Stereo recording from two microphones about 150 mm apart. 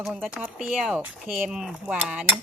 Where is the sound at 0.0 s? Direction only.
5° right (ahead or behind).